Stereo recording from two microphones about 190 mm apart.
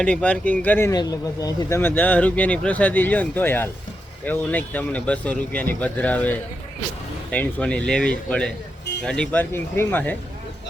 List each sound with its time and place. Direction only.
0.0 s speech: 5° left (ahead or behind)